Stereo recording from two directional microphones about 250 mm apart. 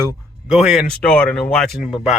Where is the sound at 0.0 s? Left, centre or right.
Centre.